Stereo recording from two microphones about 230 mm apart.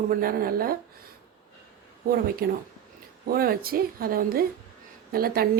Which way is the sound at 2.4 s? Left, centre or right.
Right.